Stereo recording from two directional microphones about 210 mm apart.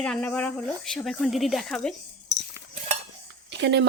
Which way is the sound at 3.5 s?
55° right (ahead or behind).